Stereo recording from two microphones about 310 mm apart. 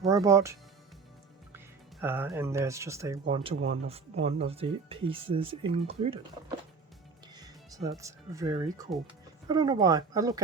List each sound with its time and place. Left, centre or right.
0.0 s speech: centre
1.5 s speech: centre
7.3 s speech: centre